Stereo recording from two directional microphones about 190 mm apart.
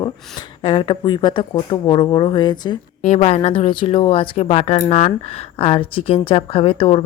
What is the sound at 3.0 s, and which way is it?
Speech, 35° left (ahead or behind).